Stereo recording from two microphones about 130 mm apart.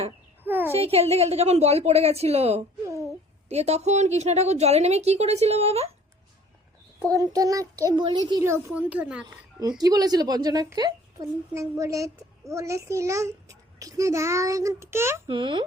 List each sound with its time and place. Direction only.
0.4 s a sound: 15° right (ahead or behind)
0.7 s a woman's voice: 50° right (ahead or behind)
7.0 s a child's voice: 25° right (ahead or behind)
8.4 s speech: 20° right (ahead or behind)
9.2 s a child's voice: 30° right (ahead or behind)
15.3 s a child's voice: 40° right (ahead or behind)